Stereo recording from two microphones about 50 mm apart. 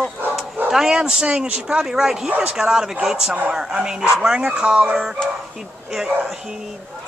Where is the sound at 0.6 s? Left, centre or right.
Centre.